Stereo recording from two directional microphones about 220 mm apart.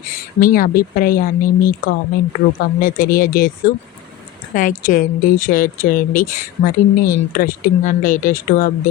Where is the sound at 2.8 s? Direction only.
40° left (ahead or behind).